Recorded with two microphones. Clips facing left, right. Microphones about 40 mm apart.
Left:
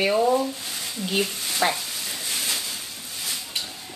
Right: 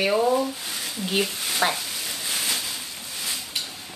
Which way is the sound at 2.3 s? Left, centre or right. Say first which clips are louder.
Right 1 dB; centre.